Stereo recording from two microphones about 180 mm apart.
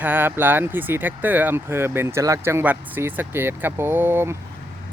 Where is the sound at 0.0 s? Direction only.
10° right (ahead or behind).